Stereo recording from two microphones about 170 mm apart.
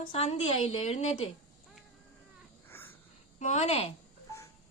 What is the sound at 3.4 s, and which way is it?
Speech, 40° left (ahead or behind).